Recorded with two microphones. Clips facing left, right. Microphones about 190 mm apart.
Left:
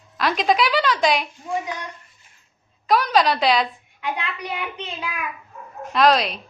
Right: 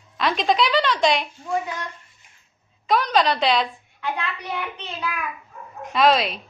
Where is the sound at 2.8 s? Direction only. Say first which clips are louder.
Left 1 dB; 5° left (ahead or behind).